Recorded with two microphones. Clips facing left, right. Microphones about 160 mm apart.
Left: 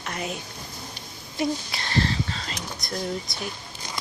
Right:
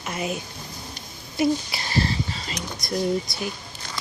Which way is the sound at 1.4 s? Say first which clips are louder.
Right 4 dB; 5° right (ahead or behind).